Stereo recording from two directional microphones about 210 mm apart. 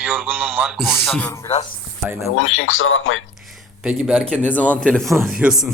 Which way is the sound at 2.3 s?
70° left (ahead or behind).